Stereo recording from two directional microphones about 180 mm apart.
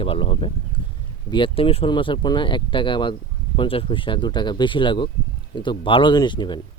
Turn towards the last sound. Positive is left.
turn(degrees=25)  # may be behind; listen again after turning